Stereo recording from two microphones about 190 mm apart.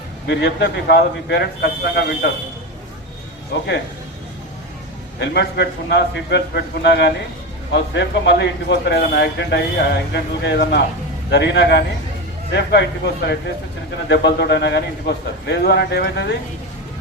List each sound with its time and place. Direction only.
0.3 s a man's voice: 65° left (ahead or behind)
3.5 s speech: 65° left (ahead or behind)
5.2 s a man's voice: 60° left (ahead or behind)
14.1 s a man's voice: 60° left (ahead or behind)